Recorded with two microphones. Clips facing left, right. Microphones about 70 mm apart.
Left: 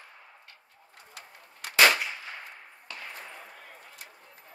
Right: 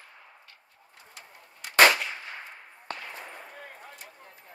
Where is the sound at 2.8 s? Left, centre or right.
Right.